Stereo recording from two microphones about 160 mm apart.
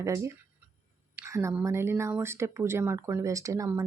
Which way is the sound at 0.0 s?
20° right (ahead or behind).